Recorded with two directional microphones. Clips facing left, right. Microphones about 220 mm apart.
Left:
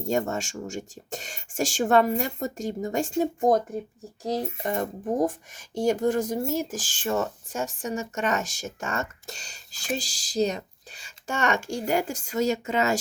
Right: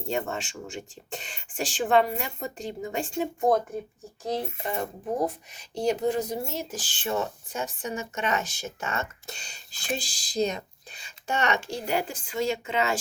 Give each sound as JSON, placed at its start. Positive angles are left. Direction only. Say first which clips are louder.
{"t": 0.0, "sound": "speech", "louder": "left 4 dB", "side_deg": 40}